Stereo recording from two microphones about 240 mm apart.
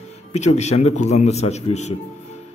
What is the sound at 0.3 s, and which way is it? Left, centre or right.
A man's voice, left.